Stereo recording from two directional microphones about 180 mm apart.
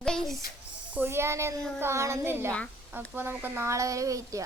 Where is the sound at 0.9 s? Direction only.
10° right (ahead or behind).